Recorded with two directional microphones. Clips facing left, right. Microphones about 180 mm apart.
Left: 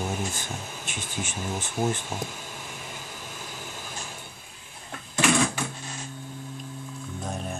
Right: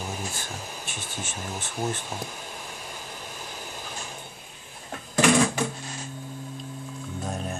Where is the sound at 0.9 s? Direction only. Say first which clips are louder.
Left 2 dB; 15° left (ahead or behind).